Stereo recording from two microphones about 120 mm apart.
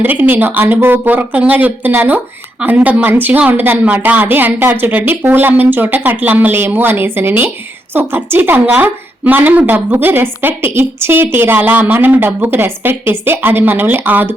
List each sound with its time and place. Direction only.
0.0 s speech: 15° right (ahead or behind)